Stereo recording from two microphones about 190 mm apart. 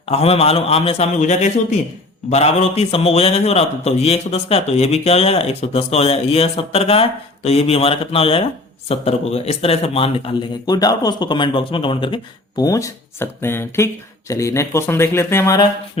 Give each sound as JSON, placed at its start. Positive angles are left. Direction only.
{"t": 0.0, "sound": "a man's voice", "side_deg": 30}